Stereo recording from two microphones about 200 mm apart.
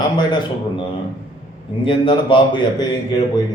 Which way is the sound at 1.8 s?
25° left (ahead or behind).